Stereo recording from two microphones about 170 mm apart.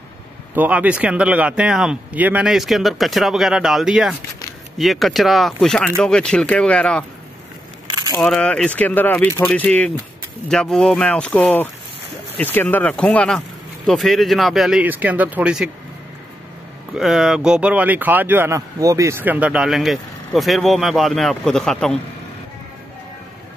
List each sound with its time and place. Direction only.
0.6 s speech: 10° right (ahead or behind)
8.2 s speech: 5° left (ahead or behind)
16.9 s speech: 5° right (ahead or behind)